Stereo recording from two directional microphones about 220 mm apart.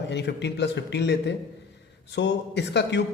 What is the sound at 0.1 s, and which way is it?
A man's voice, 50° left (ahead or behind).